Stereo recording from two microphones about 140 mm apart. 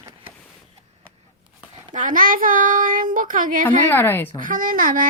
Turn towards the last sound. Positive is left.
turn(degrees=-85)